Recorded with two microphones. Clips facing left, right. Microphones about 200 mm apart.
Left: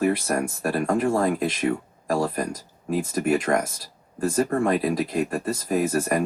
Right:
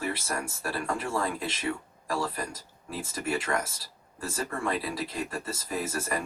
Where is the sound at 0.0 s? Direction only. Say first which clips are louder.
Left 10 dB; 50° left (ahead or behind).